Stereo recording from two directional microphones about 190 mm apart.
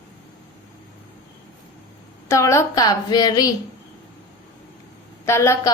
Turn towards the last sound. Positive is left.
turn(degrees=15)  # may be behind; listen again after turning